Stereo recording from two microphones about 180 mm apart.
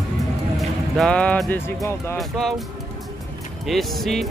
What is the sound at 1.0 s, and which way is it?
Speech, 5° left (ahead or behind).